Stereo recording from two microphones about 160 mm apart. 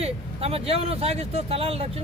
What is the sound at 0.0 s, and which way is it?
Speech, 40° right (ahead or behind).